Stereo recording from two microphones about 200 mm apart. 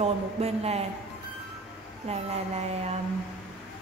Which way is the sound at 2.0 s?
30° right (ahead or behind).